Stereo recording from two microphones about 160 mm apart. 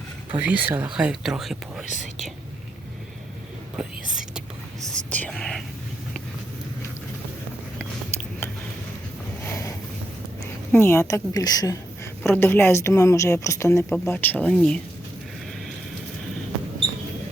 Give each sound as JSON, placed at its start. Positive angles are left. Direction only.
{"t": 0.3, "sound": "speech", "side_deg": -10}
{"t": 1.9, "sound": "speech", "side_deg": 50}
{"t": 3.8, "sound": "whispering", "side_deg": -5}
{"t": 4.9, "sound": "whispering", "side_deg": 5}
{"t": 10.7, "sound": "a woman's voice", "side_deg": 15}